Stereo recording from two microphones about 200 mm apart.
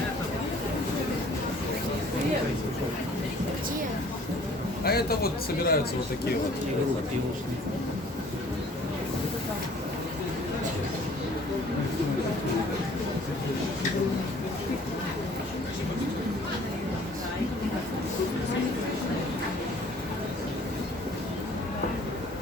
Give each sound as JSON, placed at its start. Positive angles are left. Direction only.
{"t": 4.8, "sound": "a man's voice", "side_deg": 50}